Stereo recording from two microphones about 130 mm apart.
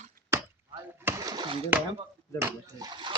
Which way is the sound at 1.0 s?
30° right (ahead or behind).